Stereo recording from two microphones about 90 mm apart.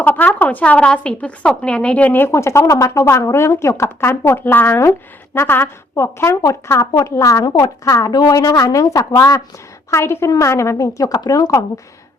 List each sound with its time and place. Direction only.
0.0 s a woman's voice: 15° left (ahead or behind); by 9.4 s 40° left (ahead or behind)
9.9 s a woman's voice: 30° left (ahead or behind)